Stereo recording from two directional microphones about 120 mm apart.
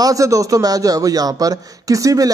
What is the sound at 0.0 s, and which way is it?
A man's voice, 30° right (ahead or behind).